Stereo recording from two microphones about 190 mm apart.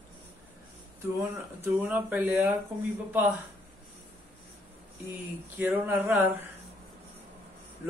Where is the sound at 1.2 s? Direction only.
10° right (ahead or behind).